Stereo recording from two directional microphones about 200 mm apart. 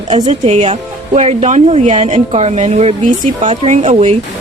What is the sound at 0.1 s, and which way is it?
Speech, 30° right (ahead or behind).